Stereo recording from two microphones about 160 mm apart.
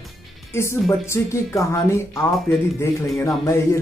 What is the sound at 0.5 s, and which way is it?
Speech, 15° left (ahead or behind).